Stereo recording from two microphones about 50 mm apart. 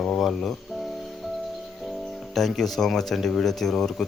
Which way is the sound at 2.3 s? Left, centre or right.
Centre.